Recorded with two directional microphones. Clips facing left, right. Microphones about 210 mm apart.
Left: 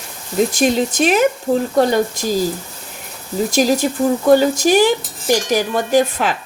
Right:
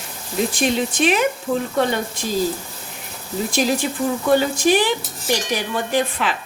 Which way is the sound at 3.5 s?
40° left (ahead or behind).